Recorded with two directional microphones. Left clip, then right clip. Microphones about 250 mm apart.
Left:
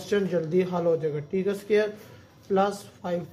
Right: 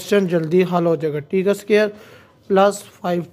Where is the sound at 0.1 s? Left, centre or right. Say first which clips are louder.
Right 8 dB; right.